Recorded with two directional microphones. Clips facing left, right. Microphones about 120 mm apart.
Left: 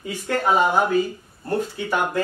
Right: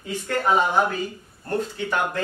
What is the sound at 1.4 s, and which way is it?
Speech, 10° left (ahead or behind).